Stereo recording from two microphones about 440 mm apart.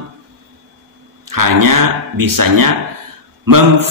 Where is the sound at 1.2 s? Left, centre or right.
Right.